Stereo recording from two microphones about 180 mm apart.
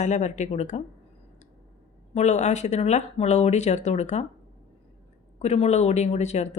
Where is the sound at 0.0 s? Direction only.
40° left (ahead or behind).